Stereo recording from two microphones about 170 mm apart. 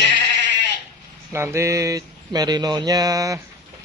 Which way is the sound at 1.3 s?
15° right (ahead or behind).